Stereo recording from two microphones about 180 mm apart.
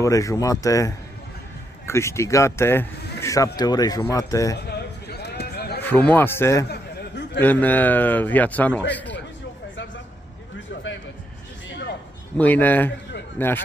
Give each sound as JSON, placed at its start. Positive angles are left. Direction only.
{"t": 0.0, "sound": "speech", "side_deg": 20}
{"t": 4.6, "sound": "a sound", "side_deg": 65}
{"t": 5.8, "sound": "speech", "side_deg": 10}
{"t": 12.4, "sound": "speech", "side_deg": 10}